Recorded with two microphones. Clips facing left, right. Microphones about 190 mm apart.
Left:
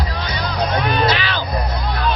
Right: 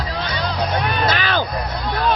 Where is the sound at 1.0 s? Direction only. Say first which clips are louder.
Even; 50° right (ahead or behind).